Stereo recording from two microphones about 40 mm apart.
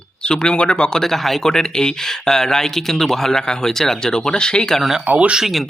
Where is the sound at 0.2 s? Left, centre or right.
Left.